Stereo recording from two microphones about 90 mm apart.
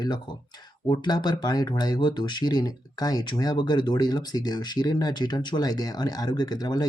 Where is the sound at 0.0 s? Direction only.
55° left (ahead or behind).